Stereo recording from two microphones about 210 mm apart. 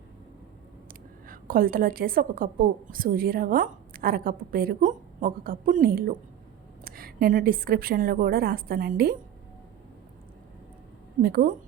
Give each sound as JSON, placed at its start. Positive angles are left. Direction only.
{"t": 0.9, "sound": "a woman's voice", "side_deg": -40}
{"t": 11.2, "sound": "a woman's voice", "side_deg": -45}